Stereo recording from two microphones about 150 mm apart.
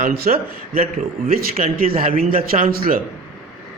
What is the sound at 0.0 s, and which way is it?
A man's voice, 90° right.